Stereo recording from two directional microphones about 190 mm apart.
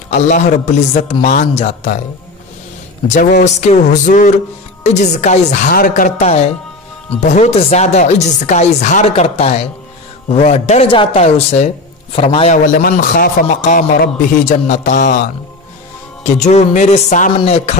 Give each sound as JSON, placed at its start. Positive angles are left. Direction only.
{"t": 0.1, "sound": "speech", "side_deg": 40}
{"t": 3.6, "sound": "a man's voice", "side_deg": 40}
{"t": 12.5, "sound": "speech", "side_deg": 50}
{"t": 16.3, "sound": "speech", "side_deg": 35}